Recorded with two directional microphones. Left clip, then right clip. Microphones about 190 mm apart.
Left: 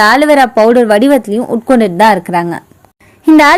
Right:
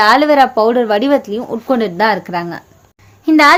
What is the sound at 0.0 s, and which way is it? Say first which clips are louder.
A woman's voice: left 2 dB; 35° left (ahead or behind).